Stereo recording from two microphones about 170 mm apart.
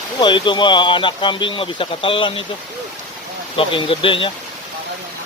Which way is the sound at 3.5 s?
30° left (ahead or behind).